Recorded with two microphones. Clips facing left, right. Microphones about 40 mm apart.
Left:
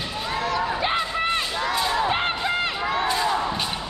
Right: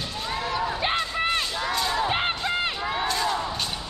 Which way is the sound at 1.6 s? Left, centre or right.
Centre.